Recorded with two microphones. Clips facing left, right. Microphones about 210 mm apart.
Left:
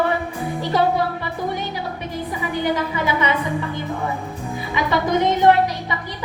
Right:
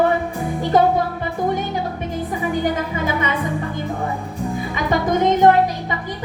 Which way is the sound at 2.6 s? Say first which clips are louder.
Even; 45° right (ahead or behind).